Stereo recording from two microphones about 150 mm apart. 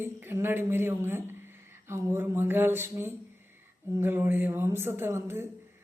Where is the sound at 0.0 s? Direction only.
15° right (ahead or behind).